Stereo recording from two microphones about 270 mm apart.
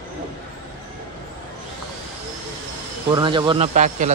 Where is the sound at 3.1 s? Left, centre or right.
Centre.